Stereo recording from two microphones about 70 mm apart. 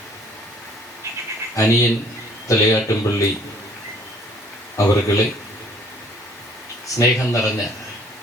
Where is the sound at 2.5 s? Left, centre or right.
Left.